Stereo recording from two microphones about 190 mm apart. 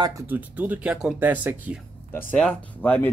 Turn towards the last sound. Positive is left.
turn(degrees=10)  # may be behind; listen again after turning